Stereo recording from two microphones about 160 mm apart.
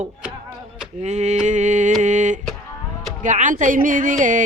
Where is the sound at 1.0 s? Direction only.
45° right (ahead or behind).